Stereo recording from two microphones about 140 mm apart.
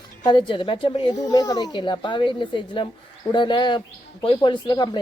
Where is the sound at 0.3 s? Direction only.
35° left (ahead or behind).